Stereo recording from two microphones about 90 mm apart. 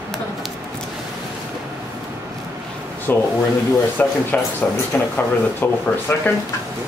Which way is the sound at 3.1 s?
20° left (ahead or behind).